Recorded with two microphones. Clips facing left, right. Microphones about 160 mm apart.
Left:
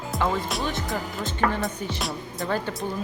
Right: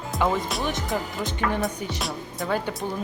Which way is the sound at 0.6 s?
20° right (ahead or behind).